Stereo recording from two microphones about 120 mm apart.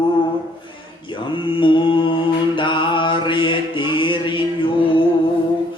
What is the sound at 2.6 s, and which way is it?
Mantra, 45° left (ahead or behind).